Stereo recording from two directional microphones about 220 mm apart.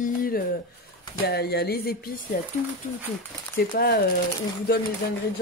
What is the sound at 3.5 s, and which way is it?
Speech, 45° left (ahead or behind).